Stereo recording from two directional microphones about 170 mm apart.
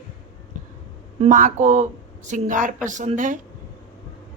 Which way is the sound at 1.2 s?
50° right (ahead or behind).